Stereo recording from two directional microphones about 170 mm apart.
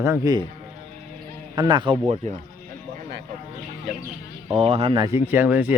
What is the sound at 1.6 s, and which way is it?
Speech, 30° right (ahead or behind).